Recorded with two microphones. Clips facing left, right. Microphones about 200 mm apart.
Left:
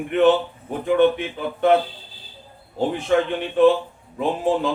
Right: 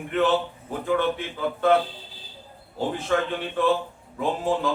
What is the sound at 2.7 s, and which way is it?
A man's voice, 20° left (ahead or behind).